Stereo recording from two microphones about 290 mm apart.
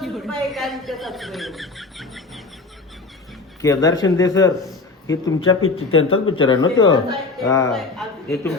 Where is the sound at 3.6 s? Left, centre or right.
Centre.